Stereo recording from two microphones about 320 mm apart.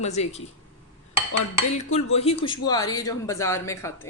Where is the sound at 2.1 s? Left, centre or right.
Centre.